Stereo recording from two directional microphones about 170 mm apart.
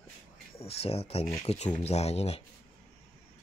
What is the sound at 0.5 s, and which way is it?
Speech, 35° left (ahead or behind).